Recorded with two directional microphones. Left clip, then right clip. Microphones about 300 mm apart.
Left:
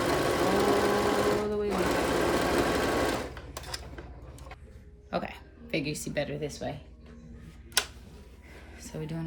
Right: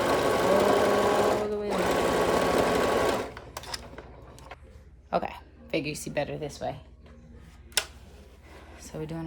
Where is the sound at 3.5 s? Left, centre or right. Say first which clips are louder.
Right 2 dB; centre.